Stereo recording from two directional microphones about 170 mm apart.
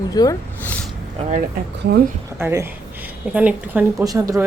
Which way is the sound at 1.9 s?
65° right (ahead or behind).